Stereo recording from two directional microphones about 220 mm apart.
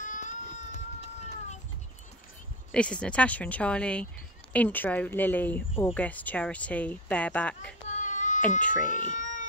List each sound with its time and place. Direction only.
0.0 s baby cry: 35° left (ahead or behind)
2.7 s speech: 5° left (ahead or behind)
7.9 s a sound: 35° left (ahead or behind)
8.8 s cat: 35° left (ahead or behind)